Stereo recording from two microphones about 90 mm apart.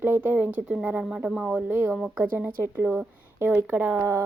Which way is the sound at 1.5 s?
25° right (ahead or behind).